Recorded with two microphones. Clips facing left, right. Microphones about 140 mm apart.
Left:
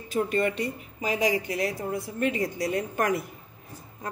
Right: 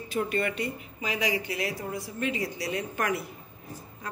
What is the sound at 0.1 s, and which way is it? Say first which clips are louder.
A woman's voice: left 3 dB; 40° left (ahead or behind).